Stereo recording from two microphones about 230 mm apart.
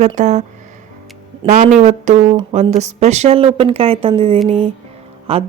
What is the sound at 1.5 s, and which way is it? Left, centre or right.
A woman's voice, right.